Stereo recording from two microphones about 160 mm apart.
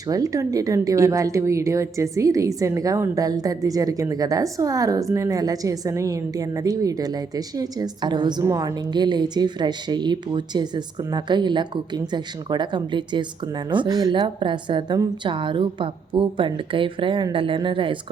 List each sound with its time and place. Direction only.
0.1 s a woman's voice: 20° right (ahead or behind)